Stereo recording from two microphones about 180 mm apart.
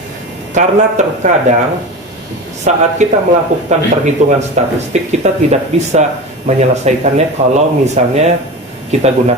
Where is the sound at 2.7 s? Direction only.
40° right (ahead or behind).